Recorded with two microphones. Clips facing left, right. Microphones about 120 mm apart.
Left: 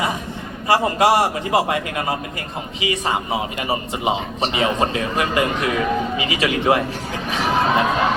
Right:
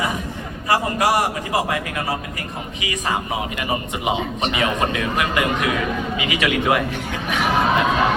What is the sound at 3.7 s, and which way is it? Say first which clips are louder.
A man's voice: left 1 dB; 30° left (ahead or behind).